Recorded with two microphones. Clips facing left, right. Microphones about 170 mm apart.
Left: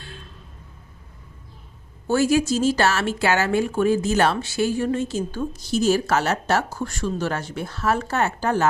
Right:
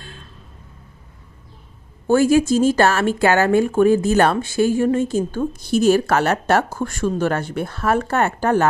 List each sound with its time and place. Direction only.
2.0 s a woman's voice: 50° right (ahead or behind)